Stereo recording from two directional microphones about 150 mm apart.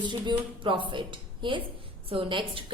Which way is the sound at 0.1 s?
30° right (ahead or behind).